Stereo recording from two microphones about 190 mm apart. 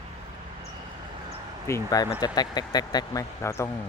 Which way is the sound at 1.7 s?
20° left (ahead or behind).